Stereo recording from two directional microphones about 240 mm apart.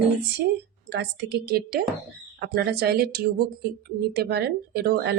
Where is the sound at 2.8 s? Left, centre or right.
Right.